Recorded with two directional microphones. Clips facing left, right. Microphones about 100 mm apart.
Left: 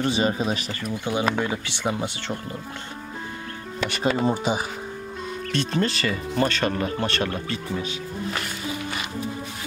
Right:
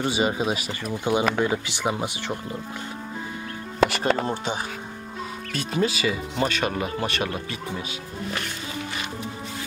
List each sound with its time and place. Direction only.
0.0 s speech: 15° right (ahead or behind)
3.9 s speech: centre (ahead or behind)
5.5 s speech: 5° right (ahead or behind)